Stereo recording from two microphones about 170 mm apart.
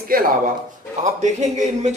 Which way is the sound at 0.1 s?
55° right (ahead or behind).